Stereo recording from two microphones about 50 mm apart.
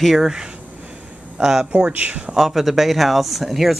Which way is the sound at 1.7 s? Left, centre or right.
Right.